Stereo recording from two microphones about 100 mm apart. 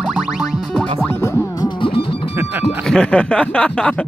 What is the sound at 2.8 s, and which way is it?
Speech, 10° left (ahead or behind).